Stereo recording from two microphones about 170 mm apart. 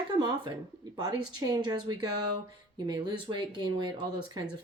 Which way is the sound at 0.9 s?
25° right (ahead or behind).